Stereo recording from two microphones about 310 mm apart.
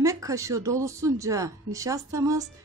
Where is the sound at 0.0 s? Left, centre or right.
Centre.